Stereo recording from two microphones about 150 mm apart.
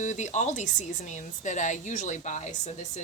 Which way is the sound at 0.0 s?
50° left (ahead or behind).